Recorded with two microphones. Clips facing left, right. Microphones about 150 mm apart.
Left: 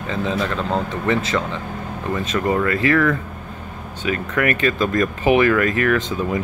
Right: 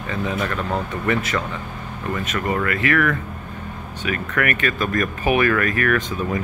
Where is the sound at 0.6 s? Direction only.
25° left (ahead or behind).